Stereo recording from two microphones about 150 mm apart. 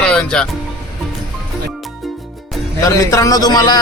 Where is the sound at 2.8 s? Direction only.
20° left (ahead or behind).